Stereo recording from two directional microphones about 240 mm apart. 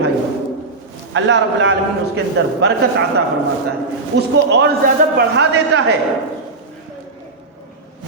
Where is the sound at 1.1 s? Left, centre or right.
Right.